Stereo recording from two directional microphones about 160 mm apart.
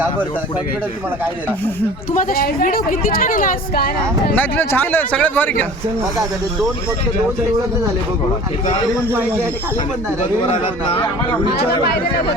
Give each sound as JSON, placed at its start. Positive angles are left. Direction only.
{"t": 2.1, "sound": "a woman's voice", "side_deg": 65}
{"t": 4.4, "sound": "a man's voice", "side_deg": 10}